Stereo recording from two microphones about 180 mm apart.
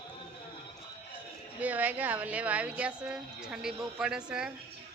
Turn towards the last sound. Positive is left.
turn(degrees=-5)  # may be behind; listen again after turning